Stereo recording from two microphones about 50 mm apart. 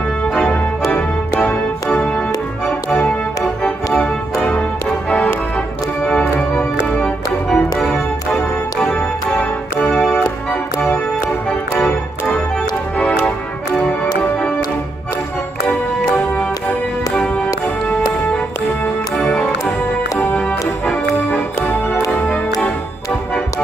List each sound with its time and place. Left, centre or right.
2.1 s music: centre
3.6 s music: left
6.0 s organ: left
7.0 s music: centre
8.8 s organ: left
9.8 s organ: centre
11.7 s organ: left
20.3 s music: left